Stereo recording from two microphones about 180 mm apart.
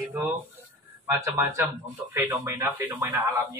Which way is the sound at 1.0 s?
15° right (ahead or behind).